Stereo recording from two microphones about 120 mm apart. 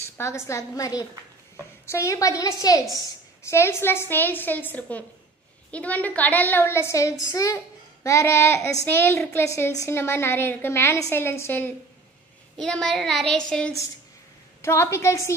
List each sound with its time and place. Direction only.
0.2 s a woman's voice: 25° left (ahead or behind)
12.5 s a sound: 5° left (ahead or behind)
14.6 s a woman's voice: 20° left (ahead or behind)